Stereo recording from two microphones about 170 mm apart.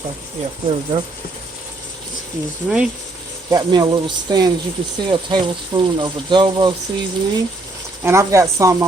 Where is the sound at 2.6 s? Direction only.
5° right (ahead or behind).